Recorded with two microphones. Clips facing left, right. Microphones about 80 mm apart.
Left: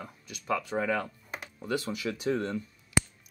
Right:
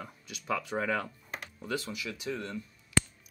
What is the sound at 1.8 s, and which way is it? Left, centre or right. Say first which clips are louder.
Speech: left 6 dB; left.